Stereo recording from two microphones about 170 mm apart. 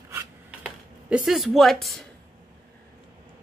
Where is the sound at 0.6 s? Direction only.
5° right (ahead or behind).